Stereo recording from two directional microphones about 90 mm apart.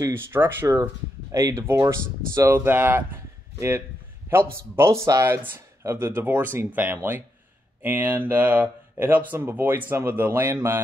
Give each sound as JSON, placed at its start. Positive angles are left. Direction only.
{"t": 0.1, "sound": "speech", "side_deg": -25}
{"t": 1.3, "sound": "speech", "side_deg": -35}